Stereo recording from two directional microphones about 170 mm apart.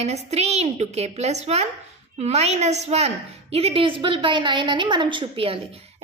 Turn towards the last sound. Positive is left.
turn(degrees=-30)  # may be behind; listen again after turning